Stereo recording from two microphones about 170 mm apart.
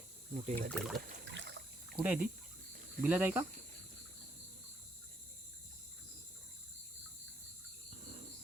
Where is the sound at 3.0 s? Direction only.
10° right (ahead or behind).